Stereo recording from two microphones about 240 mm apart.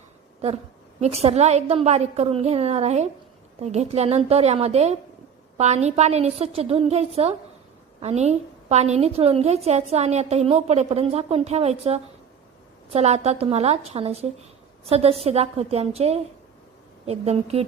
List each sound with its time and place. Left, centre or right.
1.0 s a woman's voice: right